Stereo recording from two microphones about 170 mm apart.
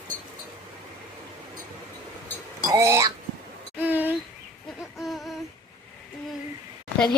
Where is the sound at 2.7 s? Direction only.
20° right (ahead or behind).